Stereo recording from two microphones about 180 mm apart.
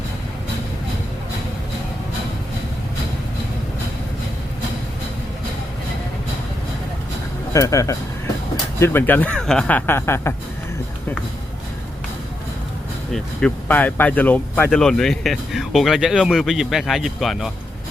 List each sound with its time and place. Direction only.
7.5 s speech: 20° left (ahead or behind)
13.1 s speech: 5° left (ahead or behind)